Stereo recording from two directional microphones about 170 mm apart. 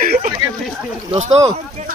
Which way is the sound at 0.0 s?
55° right (ahead or behind).